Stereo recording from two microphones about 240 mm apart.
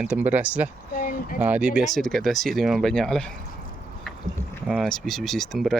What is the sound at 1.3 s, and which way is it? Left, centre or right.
Speech, centre.